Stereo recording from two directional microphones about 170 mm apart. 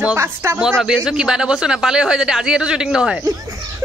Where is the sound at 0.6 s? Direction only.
Centre (ahead or behind).